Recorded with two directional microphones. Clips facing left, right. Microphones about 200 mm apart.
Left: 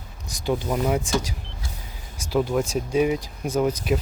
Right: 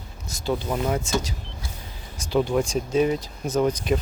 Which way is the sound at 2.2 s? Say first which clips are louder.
Right 1 dB; 5° left (ahead or behind).